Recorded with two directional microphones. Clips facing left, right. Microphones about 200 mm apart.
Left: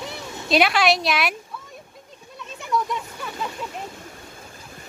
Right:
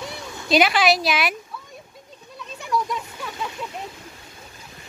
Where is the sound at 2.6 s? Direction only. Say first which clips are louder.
Even; centre (ahead or behind).